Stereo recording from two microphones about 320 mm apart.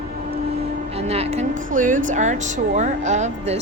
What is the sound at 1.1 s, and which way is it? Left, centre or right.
Speech, centre.